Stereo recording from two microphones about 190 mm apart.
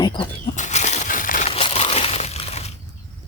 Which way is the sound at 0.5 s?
40° left (ahead or behind).